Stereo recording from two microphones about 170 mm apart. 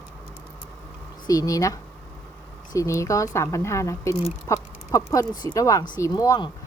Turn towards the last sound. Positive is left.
turn(degrees=20)  # may be behind; listen again after turning